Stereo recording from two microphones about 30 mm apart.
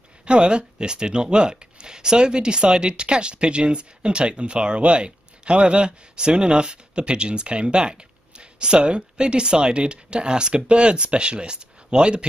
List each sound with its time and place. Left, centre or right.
0.2 s speech: right